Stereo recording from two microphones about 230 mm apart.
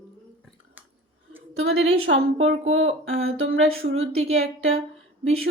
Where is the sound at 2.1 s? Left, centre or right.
Right.